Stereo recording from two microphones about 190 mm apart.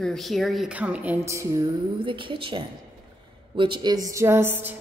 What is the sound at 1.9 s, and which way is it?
A woman's voice, 25° right (ahead or behind).